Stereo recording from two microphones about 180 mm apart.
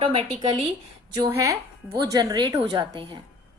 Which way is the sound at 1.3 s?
15° right (ahead or behind).